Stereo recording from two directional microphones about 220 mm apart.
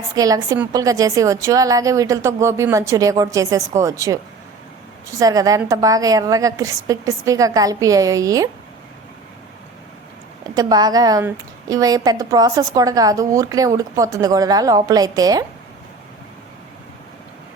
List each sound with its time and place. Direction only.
0.2 s a woman's voice: 15° right (ahead or behind)
5.2 s a woman's voice: 15° right (ahead or behind)
10.4 s a woman's voice: 20° right (ahead or behind)